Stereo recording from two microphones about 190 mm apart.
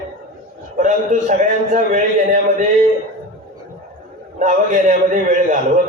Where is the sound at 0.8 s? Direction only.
40° right (ahead or behind).